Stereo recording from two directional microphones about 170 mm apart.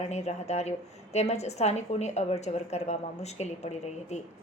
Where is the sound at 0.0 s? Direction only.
40° left (ahead or behind).